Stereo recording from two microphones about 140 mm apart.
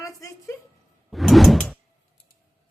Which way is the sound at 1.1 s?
Centre (ahead or behind).